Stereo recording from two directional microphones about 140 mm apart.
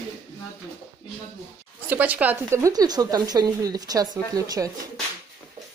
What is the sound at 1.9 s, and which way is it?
Speech, 10° right (ahead or behind).